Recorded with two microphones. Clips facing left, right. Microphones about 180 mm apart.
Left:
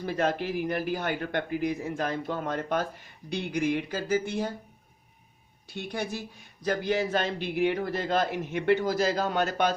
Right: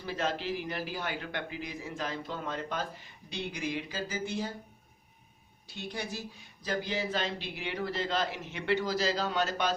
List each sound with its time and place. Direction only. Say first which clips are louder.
0.0 s a man's voice: left 5 dB; 55° left (ahead or behind)
5.7 s a man's voice: left 5 dB; 55° left (ahead or behind)